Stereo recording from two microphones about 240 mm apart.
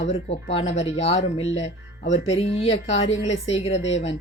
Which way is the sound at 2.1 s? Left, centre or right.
Left.